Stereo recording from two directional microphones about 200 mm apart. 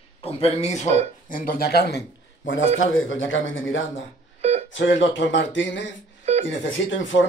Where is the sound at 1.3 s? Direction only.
45° left (ahead or behind); by 2.6 s 60° left (ahead or behind).